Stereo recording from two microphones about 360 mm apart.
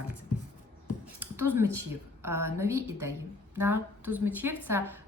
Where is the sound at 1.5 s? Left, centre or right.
Centre.